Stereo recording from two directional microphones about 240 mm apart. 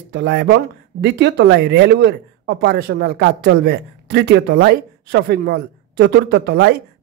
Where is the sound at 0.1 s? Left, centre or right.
Right.